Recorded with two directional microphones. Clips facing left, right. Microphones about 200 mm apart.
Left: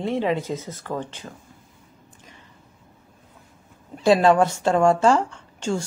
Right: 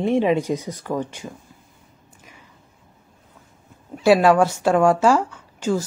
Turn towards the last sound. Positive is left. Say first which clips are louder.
# right 3 dB
turn(degrees=-5)  # may be behind; listen again after turning